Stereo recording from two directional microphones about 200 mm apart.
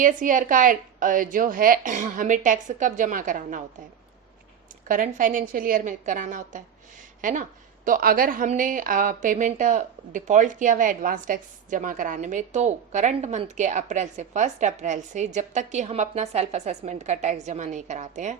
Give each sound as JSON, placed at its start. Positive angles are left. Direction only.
{"t": 0.0, "sound": "a woman's voice", "side_deg": -40}
{"t": 4.9, "sound": "a woman's voice", "side_deg": -40}